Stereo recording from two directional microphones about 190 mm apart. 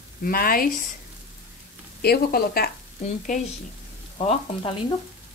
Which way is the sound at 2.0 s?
55° left (ahead or behind).